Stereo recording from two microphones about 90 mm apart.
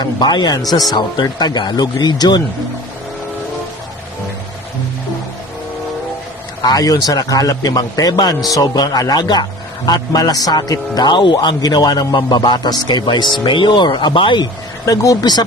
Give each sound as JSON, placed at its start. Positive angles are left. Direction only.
{"t": 0.0, "sound": "a man's voice", "side_deg": 55}
{"t": 6.6, "sound": "a man's voice", "side_deg": 45}